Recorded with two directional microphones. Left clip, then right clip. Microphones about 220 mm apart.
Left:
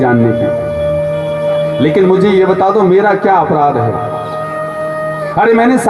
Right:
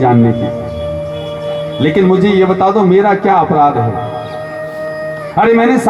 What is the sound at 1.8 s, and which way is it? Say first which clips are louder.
A man's voice: even; 35° left (ahead or behind).